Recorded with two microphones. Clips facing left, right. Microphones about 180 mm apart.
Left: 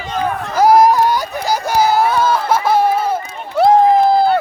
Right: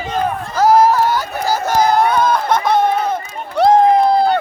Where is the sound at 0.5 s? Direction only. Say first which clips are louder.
Left 1 dB; 15° left (ahead or behind).